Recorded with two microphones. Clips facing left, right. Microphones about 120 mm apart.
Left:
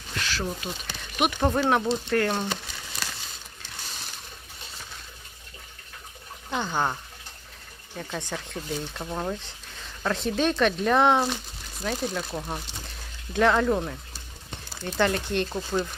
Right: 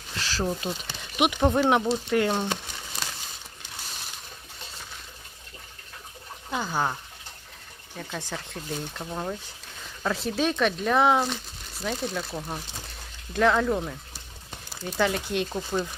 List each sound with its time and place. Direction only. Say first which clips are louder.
0.2 s speech: right 2 dB; 30° right (ahead or behind)
1.2 s speech: right 2 dB; 10° right (ahead or behind)
6.5 s speech: left 1 dB; 5° right (ahead or behind)
7.9 s speech: left 2 dB; centre (ahead or behind)